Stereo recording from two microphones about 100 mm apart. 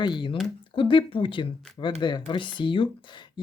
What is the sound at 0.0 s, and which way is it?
Speech, 50° left (ahead or behind).